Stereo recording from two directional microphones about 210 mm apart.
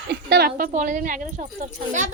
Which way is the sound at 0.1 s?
50° right (ahead or behind).